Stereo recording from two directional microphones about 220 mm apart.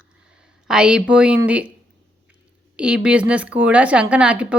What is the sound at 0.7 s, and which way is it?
A woman's voice, 5° right (ahead or behind).